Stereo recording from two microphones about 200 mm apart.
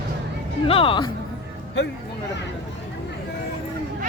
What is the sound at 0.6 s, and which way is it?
Speech, 25° left (ahead or behind).